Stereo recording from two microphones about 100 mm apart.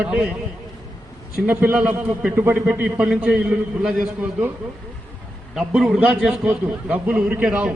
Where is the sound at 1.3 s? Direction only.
20° right (ahead or behind).